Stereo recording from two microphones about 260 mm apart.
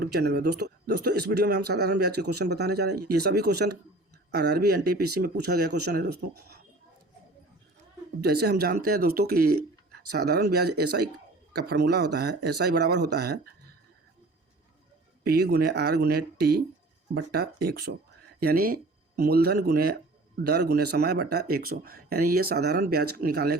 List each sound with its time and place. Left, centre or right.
0.0 s speech: right
8.2 s speech: right
15.2 s speech: right